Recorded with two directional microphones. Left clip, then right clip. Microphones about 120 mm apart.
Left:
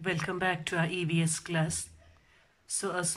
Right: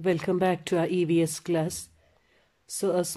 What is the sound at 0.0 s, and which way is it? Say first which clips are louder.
Speech: right 6 dB; 35° right (ahead or behind).